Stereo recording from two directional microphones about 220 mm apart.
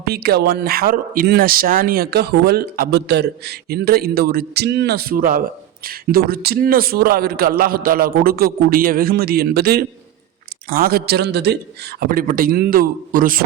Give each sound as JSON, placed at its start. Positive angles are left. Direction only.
{"t": 0.0, "sound": "speech", "side_deg": -45}